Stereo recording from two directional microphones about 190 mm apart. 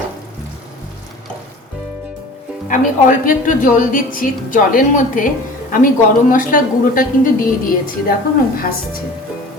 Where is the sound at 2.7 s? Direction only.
45° left (ahead or behind).